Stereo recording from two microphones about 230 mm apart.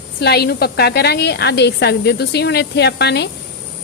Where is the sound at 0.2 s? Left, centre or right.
Left.